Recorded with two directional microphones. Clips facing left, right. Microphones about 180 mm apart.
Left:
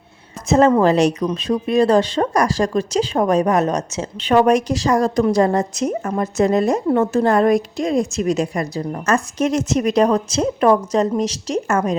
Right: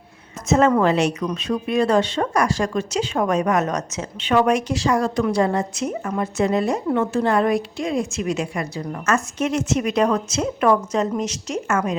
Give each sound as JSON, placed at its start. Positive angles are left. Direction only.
{"t": 0.4, "sound": "speech", "side_deg": 35}